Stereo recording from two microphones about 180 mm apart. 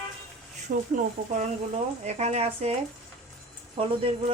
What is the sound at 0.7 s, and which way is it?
Speech, 40° right (ahead or behind).